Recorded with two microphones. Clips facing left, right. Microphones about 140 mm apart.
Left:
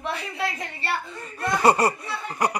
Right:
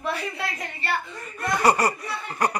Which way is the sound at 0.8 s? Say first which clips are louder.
Right 1 dB; 30° left (ahead or behind).